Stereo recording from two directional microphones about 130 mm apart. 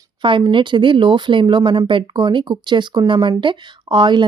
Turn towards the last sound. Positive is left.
turn(degrees=-35)  # may be behind; listen again after turning